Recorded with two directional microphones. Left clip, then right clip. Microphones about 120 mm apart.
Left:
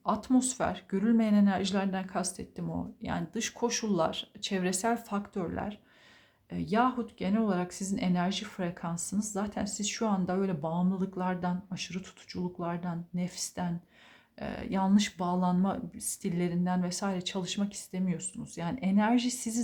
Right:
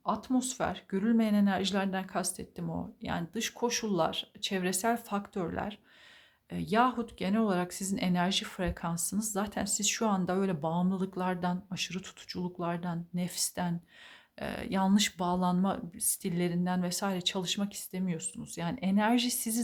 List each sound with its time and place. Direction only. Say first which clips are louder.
0.0 s speech: left 3 dB; 5° right (ahead or behind); by 19.6 s 25° right (ahead or behind)